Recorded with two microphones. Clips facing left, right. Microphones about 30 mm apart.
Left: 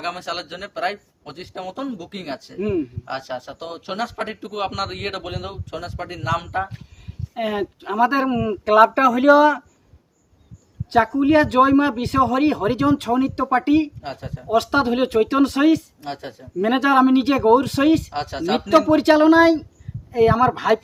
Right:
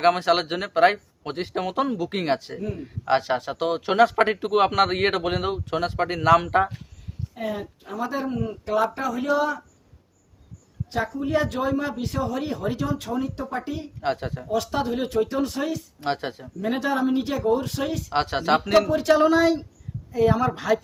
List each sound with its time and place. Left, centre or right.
0.0 s speech: right
2.6 s speech: left
3.0 s a man's voice: right
4.2 s a man's voice: right
7.3 s speech: left
10.8 s speech: left
14.0 s speech: right
14.5 s speech: left
16.0 s speech: right
16.6 s speech: left
18.1 s speech: right
18.9 s speech: left
19.2 s speech: left